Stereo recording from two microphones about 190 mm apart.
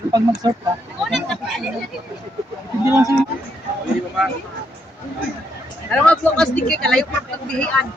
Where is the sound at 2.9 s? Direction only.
15° right (ahead or behind).